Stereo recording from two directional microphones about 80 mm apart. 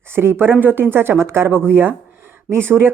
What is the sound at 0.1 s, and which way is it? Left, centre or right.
A woman's voice, right.